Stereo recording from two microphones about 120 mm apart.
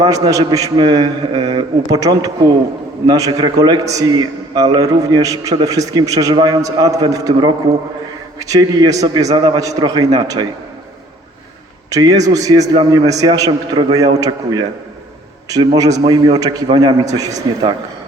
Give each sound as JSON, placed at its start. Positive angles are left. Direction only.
{"t": 0.0, "sound": "a man's voice", "side_deg": -30}
{"t": 11.9, "sound": "a man's voice", "side_deg": -30}